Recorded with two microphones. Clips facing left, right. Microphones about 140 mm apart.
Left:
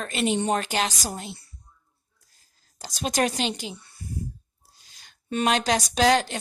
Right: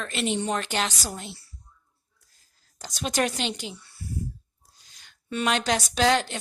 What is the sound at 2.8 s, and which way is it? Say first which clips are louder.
Speech: left 2 dB; 35° left (ahead or behind).